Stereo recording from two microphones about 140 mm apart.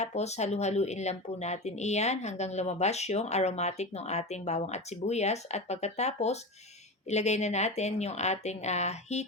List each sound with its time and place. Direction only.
0.0 s speech: 50° left (ahead or behind)